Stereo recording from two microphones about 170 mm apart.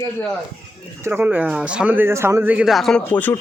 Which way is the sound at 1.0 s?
10° right (ahead or behind).